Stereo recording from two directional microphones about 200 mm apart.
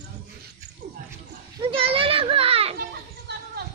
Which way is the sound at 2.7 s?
50° right (ahead or behind).